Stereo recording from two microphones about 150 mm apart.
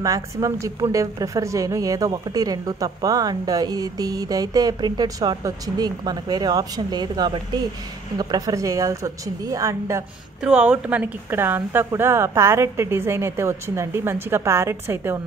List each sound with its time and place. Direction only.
0.0 s a woman's voice: 20° right (ahead or behind)
10.4 s speech: 10° right (ahead or behind)